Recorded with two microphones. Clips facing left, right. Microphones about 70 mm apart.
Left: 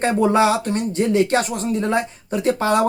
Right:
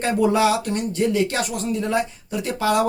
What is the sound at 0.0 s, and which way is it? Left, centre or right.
Speech, left.